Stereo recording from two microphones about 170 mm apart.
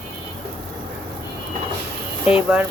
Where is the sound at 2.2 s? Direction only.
5° right (ahead or behind).